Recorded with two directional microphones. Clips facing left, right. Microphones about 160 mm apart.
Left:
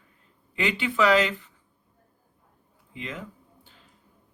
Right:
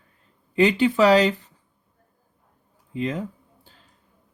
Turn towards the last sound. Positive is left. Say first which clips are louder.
# right 8 dB
turn(degrees=-35)  # may be behind; listen again after turning